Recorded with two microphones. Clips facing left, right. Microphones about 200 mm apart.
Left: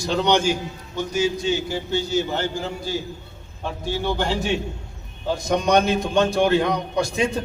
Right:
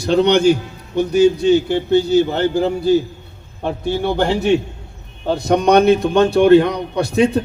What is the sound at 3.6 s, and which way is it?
A man's voice, 60° right (ahead or behind).